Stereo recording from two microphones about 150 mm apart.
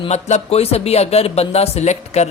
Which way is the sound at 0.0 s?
50° left (ahead or behind).